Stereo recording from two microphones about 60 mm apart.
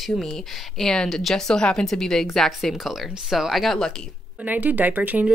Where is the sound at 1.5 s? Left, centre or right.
Centre.